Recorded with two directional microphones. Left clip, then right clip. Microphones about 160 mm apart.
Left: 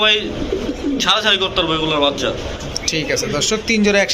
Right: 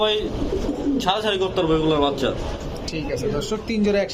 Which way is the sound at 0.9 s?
30° right (ahead or behind).